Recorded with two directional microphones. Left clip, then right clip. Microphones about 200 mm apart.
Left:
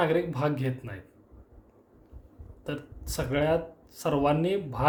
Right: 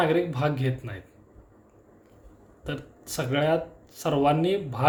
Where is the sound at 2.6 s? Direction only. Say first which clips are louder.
Right 1 dB; 10° left (ahead or behind).